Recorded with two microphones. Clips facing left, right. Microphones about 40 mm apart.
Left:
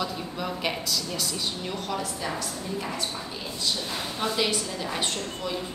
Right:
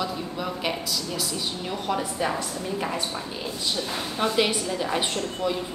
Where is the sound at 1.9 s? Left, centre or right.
Right.